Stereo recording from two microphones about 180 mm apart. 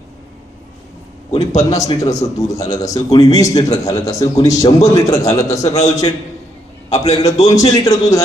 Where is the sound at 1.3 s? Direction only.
35° left (ahead or behind).